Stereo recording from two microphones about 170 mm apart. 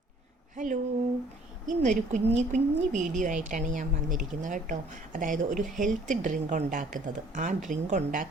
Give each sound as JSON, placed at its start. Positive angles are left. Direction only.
{"t": 0.5, "sound": "a woman's voice", "side_deg": -50}